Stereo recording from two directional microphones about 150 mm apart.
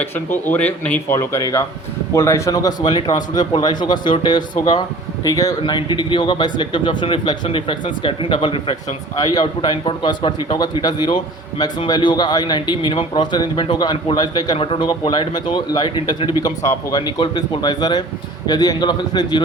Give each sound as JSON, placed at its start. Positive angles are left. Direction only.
{"t": 0.0, "sound": "a man's voice", "side_deg": 15}